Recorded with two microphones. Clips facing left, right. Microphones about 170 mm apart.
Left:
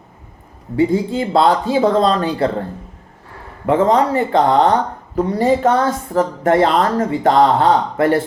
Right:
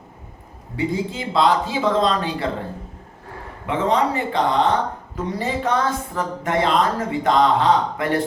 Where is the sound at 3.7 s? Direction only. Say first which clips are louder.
Left 6 dB; 45° left (ahead or behind).